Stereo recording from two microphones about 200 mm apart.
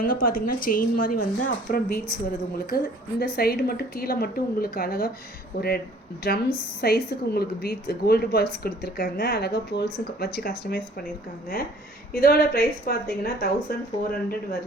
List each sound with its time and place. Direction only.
0.0 s a woman's voice: 45° left (ahead or behind)
12.1 s a woman's voice: 50° left (ahead or behind)